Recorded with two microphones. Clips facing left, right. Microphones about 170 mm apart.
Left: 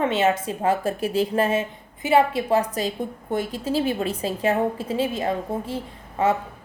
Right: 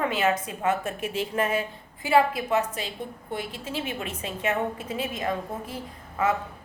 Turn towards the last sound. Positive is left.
turn(degrees=30)  # may be behind; listen again after turning